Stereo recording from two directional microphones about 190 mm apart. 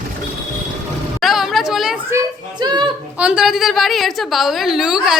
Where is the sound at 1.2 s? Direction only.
Centre (ahead or behind).